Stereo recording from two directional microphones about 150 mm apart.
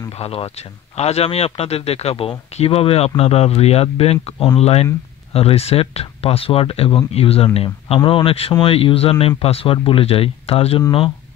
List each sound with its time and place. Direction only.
0.1 s speech: 40° left (ahead or behind)